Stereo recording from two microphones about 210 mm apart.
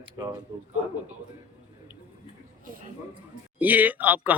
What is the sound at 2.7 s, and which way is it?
Speech, 40° right (ahead or behind).